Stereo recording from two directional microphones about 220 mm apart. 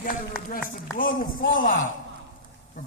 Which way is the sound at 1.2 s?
40° left (ahead or behind).